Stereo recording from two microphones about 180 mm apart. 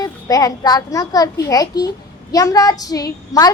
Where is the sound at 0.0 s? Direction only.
20° left (ahead or behind).